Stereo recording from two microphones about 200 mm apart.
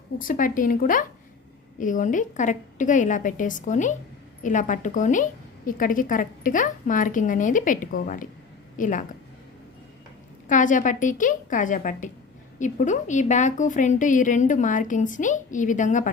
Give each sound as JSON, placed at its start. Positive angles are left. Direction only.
{"t": 0.2, "sound": "a woman's voice", "side_deg": 45}
{"t": 10.5, "sound": "a woman's voice", "side_deg": 40}